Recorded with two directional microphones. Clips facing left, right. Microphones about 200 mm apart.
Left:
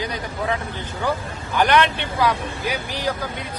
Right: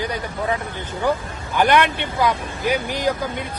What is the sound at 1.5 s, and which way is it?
Speech, 10° right (ahead or behind).